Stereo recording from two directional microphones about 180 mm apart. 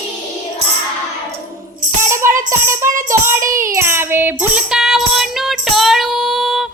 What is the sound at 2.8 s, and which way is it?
Music, 45° right (ahead or behind).